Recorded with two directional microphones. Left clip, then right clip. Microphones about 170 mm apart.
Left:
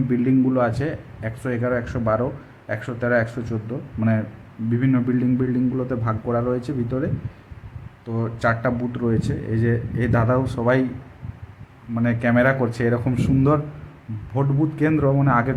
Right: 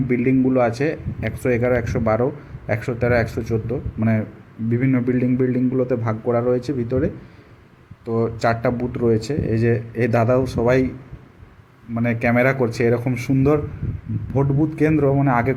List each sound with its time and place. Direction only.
0.1 s speech: 15° right (ahead or behind)
4.9 s speech: 15° right (ahead or behind)
11.9 s speech: 15° right (ahead or behind)